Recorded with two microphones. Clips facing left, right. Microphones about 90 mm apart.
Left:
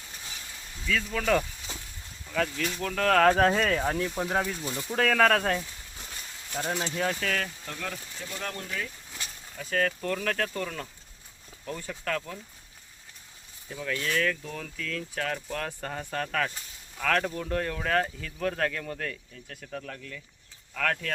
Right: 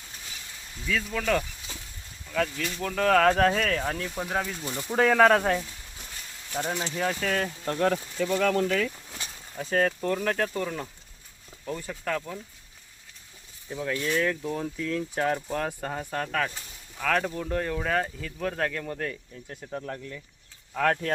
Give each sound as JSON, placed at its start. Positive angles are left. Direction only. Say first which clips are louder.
{"t": 0.9, "sound": "speech", "louder": "even", "side_deg": -5}
{"t": 1.2, "sound": "speech", "louder": "left 1 dB", "side_deg": 5}
{"t": 4.6, "sound": "speech", "louder": "right 3 dB", "side_deg": -10}
{"t": 7.3, "sound": "speech", "louder": "right 3 dB", "side_deg": -20}
{"t": 7.6, "sound": "speech", "louder": "right 12 dB", "side_deg": -45}
{"t": 8.2, "sound": "speech", "louder": "right 13 dB", "side_deg": -90}
{"t": 9.6, "sound": "speech", "louder": "right 3 dB", "side_deg": -25}
{"t": 10.0, "sound": "speech", "louder": "right 3 dB", "side_deg": -15}
{"t": 13.7, "sound": "speech", "louder": "right 3 dB", "side_deg": -20}
{"t": 19.5, "sound": "speech", "louder": "right 4 dB", "side_deg": -25}